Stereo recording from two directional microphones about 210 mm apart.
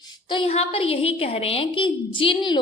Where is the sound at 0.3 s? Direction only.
25° left (ahead or behind).